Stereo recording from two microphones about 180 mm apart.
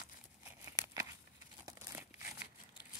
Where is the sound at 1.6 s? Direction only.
20° right (ahead or behind).